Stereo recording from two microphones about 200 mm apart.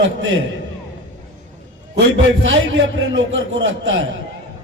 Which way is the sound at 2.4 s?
70° right (ahead or behind).